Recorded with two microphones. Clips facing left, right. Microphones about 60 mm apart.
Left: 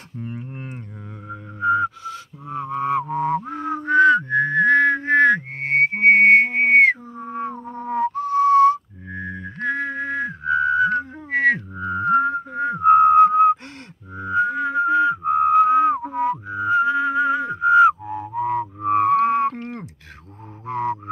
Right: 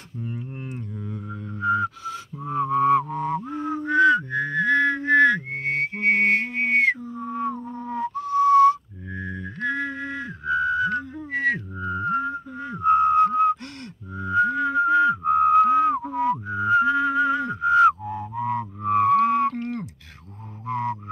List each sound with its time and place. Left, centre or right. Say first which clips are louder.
0.2 s a sound: left 1 dB; left
1.3 s music: left 4 dB; centre
2.0 s music: right 1 dB; centre
3.1 s a sound: left 4 dB; left
3.5 s a sound: left 3 dB; left
11.2 s music: left 6 dB; left
11.7 s music: left 3 dB; left
12.0 s a sound: left 8 dB; left
12.7 s whistling: left 5 dB; left
14.1 s music: even; centre
16.4 s whistling: even; centre
18.9 s whale vocalization: left 1 dB; left
20.6 s music: left 2 dB; centre